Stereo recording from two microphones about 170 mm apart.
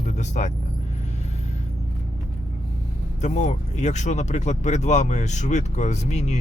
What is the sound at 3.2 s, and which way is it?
Speech, 45° left (ahead or behind).